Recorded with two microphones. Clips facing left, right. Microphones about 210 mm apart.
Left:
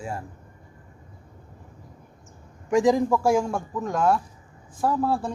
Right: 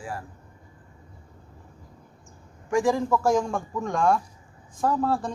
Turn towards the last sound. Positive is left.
turn(degrees=10)  # may be behind; listen again after turning